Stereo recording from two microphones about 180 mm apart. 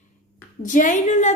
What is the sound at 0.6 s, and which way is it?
Speech, 45° left (ahead or behind).